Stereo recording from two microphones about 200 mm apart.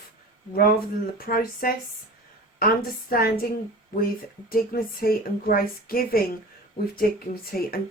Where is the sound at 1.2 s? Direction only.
45° left (ahead or behind).